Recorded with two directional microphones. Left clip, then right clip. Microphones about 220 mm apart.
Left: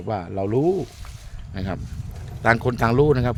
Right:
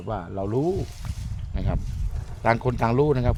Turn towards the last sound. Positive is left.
turn(degrees=15)  # may be behind; listen again after turning